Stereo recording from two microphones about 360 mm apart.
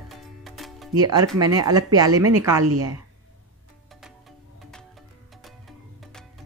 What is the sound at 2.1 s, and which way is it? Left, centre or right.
Speech, right.